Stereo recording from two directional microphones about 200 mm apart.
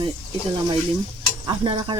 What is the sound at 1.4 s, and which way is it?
Speech, 20° right (ahead or behind).